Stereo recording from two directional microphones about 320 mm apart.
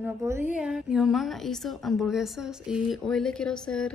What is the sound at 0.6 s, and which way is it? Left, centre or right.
A woman's voice, centre.